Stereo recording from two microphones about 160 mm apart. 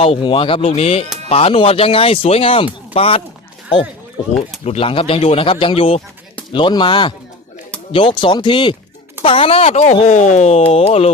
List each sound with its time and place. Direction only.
0.0 s speech: 35° left (ahead or behind)
4.6 s speech: 40° left (ahead or behind)